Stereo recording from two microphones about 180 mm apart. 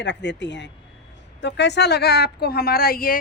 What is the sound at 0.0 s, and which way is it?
A woman's voice, 80° left.